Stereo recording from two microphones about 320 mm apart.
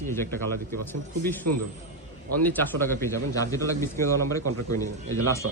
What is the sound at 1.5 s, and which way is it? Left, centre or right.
Speech, right.